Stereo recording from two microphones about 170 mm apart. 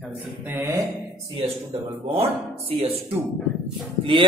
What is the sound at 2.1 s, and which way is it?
Speech, 35° right (ahead or behind).